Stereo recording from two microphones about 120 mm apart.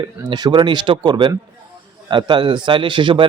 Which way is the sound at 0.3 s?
35° right (ahead or behind).